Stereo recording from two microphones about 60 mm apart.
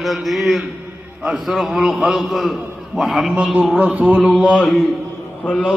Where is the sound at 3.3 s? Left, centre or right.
Centre.